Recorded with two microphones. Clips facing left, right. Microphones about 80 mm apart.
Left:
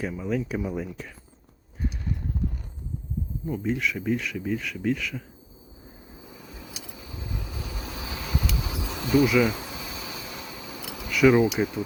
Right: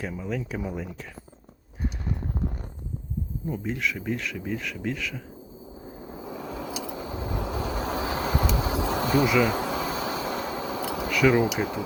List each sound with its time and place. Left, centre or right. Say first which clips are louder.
0.0 s speech: left 3 dB; centre
3.5 s speech: left 2 dB; centre
6.1 s vehicle: right 11 dB; right
8.5 s a sound: right 7 dB; right
11.1 s a sound: left 3 dB; centre
11.3 s speech: left 2 dB; right